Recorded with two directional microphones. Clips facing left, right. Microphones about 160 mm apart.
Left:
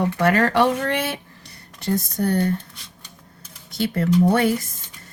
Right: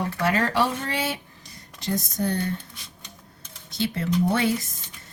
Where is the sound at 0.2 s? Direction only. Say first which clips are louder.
Left 5 dB; 60° left (ahead or behind).